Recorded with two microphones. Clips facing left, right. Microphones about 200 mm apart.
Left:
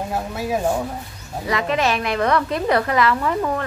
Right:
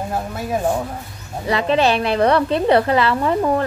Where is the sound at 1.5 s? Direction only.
30° right (ahead or behind).